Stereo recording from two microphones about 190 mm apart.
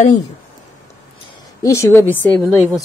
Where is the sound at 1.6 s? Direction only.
15° left (ahead or behind).